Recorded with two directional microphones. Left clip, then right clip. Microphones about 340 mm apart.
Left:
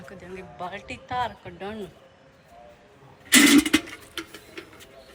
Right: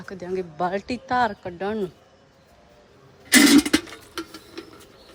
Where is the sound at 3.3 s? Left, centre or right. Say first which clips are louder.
Right 1 dB; right.